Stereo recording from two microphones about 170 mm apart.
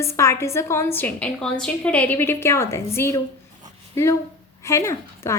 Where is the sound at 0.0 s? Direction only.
15° left (ahead or behind).